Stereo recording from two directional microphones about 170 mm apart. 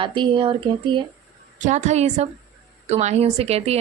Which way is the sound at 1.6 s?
45° right (ahead or behind).